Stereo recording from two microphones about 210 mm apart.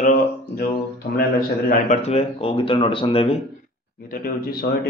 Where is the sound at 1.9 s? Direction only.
30° left (ahead or behind).